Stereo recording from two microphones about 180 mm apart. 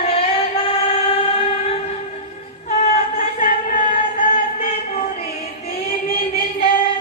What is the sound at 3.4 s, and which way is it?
Music, 50° left (ahead or behind).